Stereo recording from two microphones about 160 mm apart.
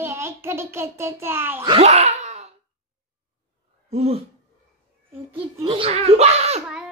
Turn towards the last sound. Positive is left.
turn(degrees=-40)  # may be behind; listen again after turning